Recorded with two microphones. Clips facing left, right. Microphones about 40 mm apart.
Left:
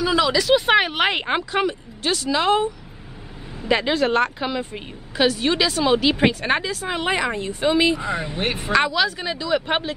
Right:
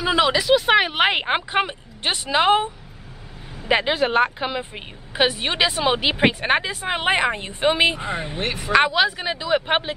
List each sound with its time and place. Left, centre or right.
0.0 s a woman's voice: right
0.5 s speech: centre
0.9 s a woman's voice: centre
8.4 s speech: left
8.7 s a woman's voice: right